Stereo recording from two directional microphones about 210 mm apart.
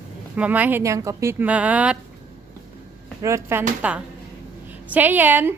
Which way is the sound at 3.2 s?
15° right (ahead or behind).